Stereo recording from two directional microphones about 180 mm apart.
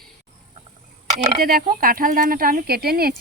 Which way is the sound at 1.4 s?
50° right (ahead or behind).